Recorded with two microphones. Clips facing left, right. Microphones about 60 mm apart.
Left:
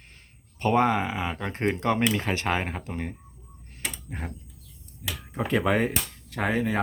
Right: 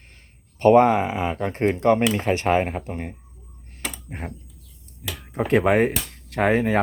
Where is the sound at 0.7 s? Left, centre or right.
Right.